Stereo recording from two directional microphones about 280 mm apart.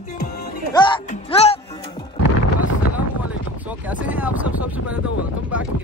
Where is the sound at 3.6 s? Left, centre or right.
Centre.